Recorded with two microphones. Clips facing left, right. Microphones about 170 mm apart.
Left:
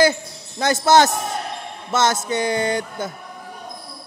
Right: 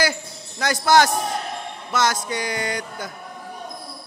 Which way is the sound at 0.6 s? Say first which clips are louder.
Left 2 dB; 25° left (ahead or behind).